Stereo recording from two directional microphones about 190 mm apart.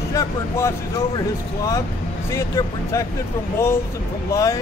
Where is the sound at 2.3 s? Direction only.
15° left (ahead or behind).